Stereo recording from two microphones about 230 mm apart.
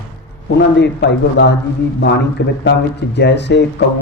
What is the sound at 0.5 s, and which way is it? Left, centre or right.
A man's voice, left.